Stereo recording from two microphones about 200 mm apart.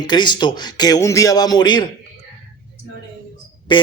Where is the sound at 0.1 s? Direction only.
20° left (ahead or behind).